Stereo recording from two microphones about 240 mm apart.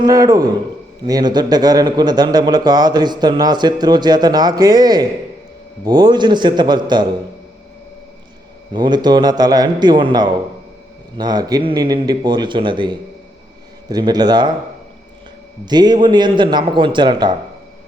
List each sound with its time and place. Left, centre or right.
0.0 s a man's voice: centre
8.7 s a man's voice: centre
15.6 s a man's voice: centre